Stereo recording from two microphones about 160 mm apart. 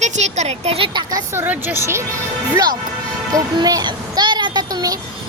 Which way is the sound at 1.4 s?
10° right (ahead or behind).